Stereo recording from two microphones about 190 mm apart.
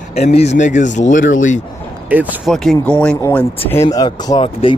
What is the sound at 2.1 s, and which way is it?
Speech, 10° right (ahead or behind).